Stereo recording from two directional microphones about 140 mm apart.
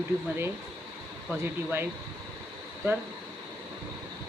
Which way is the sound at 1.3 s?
15° right (ahead or behind).